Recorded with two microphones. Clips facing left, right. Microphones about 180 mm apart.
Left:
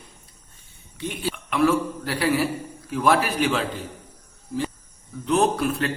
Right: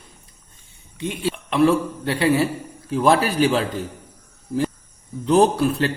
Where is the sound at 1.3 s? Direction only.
30° right (ahead or behind).